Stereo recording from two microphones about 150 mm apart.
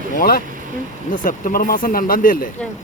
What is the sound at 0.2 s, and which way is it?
Speech, 80° left.